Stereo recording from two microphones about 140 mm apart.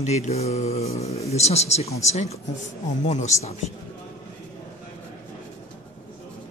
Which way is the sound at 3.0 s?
55° left (ahead or behind).